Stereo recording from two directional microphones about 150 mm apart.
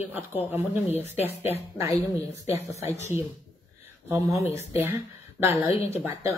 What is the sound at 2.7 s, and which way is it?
Speech, 45° left (ahead or behind).